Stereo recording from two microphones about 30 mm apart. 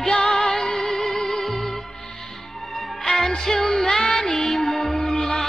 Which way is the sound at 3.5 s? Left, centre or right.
Centre.